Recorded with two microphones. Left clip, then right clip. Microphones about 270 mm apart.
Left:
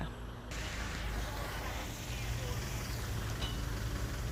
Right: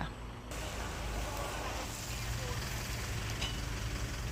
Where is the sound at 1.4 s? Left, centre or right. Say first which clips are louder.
Right 3 dB; right.